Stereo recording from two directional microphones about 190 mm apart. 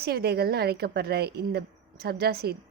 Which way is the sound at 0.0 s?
55° right (ahead or behind).